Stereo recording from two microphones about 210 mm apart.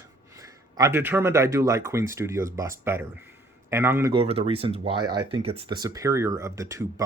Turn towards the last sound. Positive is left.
turn(degrees=-15)  # may be behind; listen again after turning